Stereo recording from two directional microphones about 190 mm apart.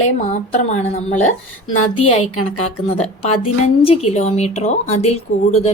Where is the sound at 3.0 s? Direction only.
30° left (ahead or behind).